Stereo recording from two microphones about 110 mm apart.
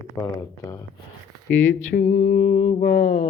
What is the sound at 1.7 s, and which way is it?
Mantra, 90° left.